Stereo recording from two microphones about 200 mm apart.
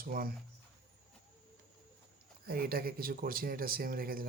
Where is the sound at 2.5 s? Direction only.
50° right (ahead or behind).